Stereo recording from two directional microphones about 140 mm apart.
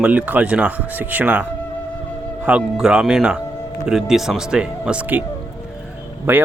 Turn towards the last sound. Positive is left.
turn(degrees=-15)  # may be behind; listen again after turning